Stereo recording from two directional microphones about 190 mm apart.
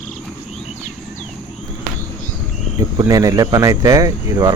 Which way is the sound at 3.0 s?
20° right (ahead or behind).